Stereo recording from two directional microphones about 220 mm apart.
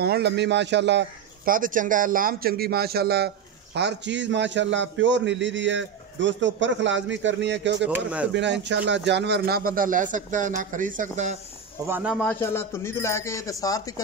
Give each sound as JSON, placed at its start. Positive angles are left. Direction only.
{"t": 0.0, "sound": "a man's voice", "side_deg": -50}
{"t": 7.8, "sound": "speech", "side_deg": -5}
{"t": 8.3, "sound": "speech", "side_deg": -55}
{"t": 11.9, "sound": "a man's voice", "side_deg": -5}